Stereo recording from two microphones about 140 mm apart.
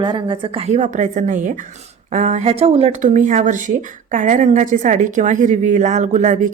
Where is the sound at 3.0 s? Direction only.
65° right (ahead or behind).